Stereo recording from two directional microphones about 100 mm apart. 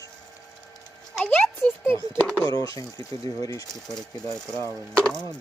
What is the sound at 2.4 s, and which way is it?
Speech, 40° left (ahead or behind).